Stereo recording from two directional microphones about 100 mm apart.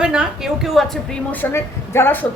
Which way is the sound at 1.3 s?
20° left (ahead or behind).